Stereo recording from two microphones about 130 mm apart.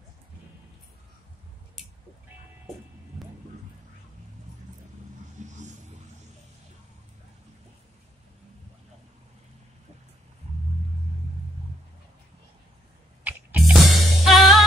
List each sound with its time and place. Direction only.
5.4 s vehicle: 65° right (ahead or behind)
13.2 s music: 10° right (ahead or behind)